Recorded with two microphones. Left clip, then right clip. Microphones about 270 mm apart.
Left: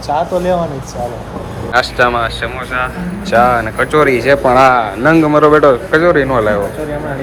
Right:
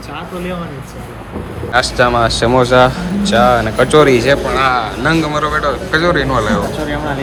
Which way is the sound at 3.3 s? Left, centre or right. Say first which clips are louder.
Left 1 dB; centre.